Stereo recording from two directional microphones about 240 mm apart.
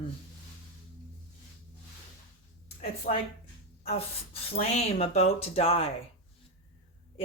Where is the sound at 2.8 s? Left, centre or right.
Left.